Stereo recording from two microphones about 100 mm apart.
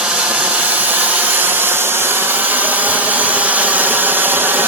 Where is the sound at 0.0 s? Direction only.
10° right (ahead or behind).